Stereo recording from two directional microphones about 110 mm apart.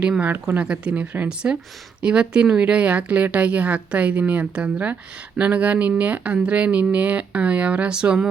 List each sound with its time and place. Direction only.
0.0 s a woman's voice: 10° right (ahead or behind)